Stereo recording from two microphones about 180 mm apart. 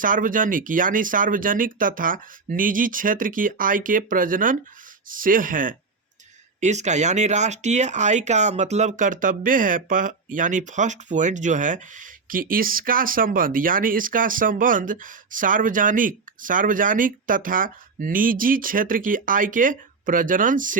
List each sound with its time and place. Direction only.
0.0 s speech: 50° right (ahead or behind)